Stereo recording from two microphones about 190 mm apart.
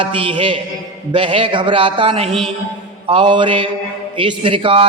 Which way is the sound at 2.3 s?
Centre (ahead or behind).